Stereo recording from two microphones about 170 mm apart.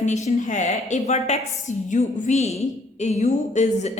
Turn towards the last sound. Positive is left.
turn(degrees=40)  # may be behind; listen again after turning